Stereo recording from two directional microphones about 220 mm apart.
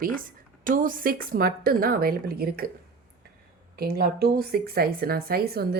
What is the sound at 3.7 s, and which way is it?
Speech, 45° right (ahead or behind).